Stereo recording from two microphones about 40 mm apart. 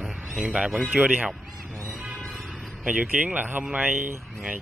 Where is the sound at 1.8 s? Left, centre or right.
Right.